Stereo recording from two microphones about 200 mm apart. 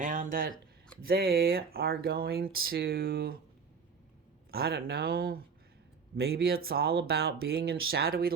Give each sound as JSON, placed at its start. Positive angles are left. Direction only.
{"t": 0.0, "sound": "speech", "side_deg": -40}
{"t": 4.5, "sound": "speech", "side_deg": -50}